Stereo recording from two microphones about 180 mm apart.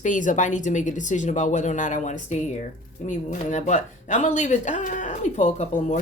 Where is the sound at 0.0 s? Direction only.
45° left (ahead or behind).